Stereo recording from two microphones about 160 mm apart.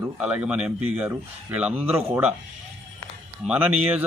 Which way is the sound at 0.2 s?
10° right (ahead or behind).